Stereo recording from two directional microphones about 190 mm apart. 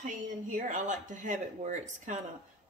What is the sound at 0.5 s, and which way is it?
Speech, 40° right (ahead or behind).